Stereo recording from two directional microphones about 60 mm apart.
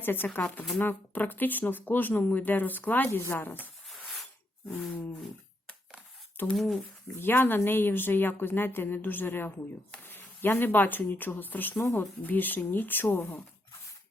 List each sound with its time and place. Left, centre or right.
0.0 s speech: left
3.1 s speech: left
3.8 s a sound: centre
6.5 s speech: centre
7.2 s speech: left